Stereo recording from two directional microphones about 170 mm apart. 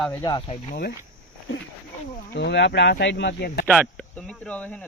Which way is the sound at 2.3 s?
90° left.